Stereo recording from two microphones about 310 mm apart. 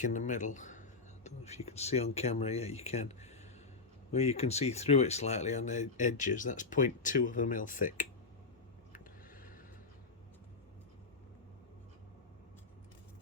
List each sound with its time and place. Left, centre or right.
0.0 s speech: left